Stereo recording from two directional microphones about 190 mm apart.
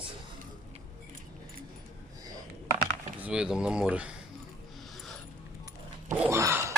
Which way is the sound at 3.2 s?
5° right (ahead or behind).